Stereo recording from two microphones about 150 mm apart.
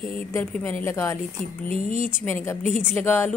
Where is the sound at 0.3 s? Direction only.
10° left (ahead or behind).